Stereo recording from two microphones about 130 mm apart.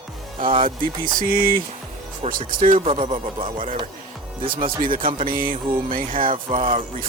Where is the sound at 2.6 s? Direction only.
50° right (ahead or behind).